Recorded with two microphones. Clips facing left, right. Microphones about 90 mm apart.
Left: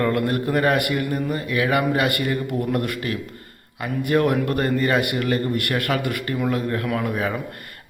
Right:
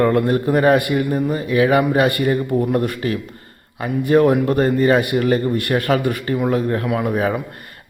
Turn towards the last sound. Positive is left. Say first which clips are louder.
# right 4 dB
turn(degrees=-20)  # may be behind; listen again after turning